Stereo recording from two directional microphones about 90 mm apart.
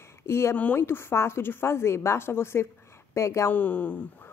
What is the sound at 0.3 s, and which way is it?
A woman's voice, 30° left (ahead or behind).